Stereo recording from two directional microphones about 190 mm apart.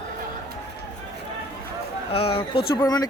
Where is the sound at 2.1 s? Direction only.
30° left (ahead or behind).